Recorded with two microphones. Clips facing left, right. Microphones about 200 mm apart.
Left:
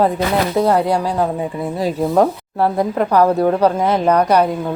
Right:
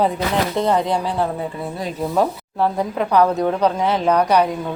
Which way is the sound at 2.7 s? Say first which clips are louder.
Left 3 dB; 10° left (ahead or behind).